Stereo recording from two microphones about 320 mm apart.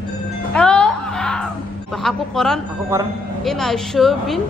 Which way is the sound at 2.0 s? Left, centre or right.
Centre.